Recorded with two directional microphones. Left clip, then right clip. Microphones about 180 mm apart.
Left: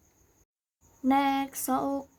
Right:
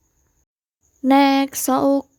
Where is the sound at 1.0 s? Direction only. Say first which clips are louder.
Right 10 dB; 55° right (ahead or behind).